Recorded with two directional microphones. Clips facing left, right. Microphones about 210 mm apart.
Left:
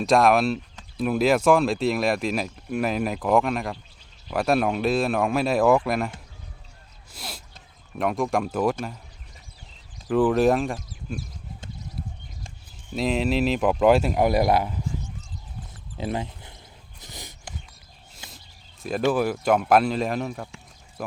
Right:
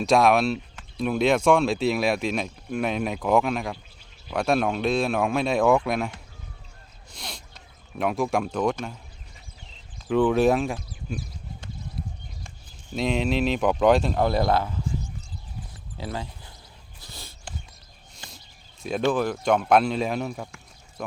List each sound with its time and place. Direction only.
0.0 s speech: centre (ahead or behind)
10.1 s speech: 5° left (ahead or behind)
12.9 s speech: centre (ahead or behind)
16.0 s a sound: 20° left (ahead or behind)
18.8 s speech: centre (ahead or behind)